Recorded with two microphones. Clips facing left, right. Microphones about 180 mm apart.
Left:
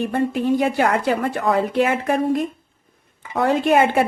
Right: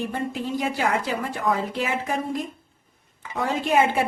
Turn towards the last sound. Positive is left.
turn(degrees=60)  # may be behind; listen again after turning